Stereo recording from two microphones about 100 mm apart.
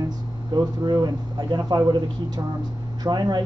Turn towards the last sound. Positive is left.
turn(degrees=-40)  # may be behind; listen again after turning